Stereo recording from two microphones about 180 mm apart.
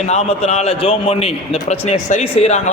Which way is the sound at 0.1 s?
35° left (ahead or behind).